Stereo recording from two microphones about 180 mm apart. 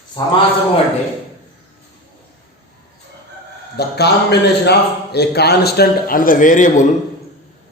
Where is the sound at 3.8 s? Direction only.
65° left (ahead or behind).